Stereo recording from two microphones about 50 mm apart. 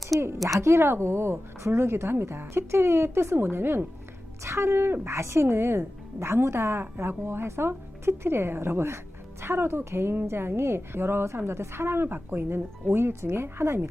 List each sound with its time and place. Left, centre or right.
0.1 s a woman's voice: centre
0.4 s a woman's voice: right